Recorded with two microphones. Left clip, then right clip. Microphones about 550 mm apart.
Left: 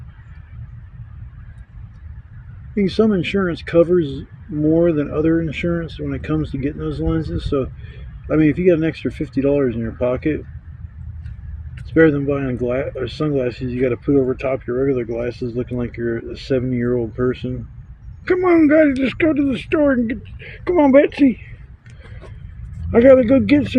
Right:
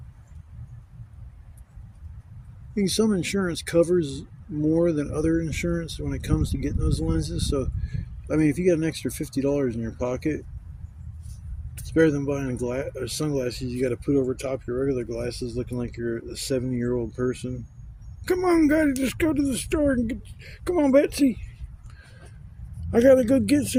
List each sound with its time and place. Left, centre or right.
2.7 s speech: right
11.9 s speech: right
22.9 s speech: right